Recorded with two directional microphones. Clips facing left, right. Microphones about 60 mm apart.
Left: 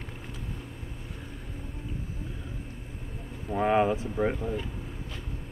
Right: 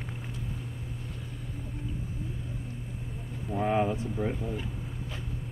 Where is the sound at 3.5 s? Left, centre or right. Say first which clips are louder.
Left 3 dB; left.